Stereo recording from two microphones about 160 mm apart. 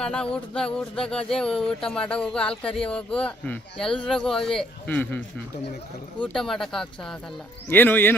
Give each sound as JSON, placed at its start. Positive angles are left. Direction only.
{"t": 0.0, "sound": "speech", "side_deg": 5}
{"t": 6.2, "sound": "speech", "side_deg": 5}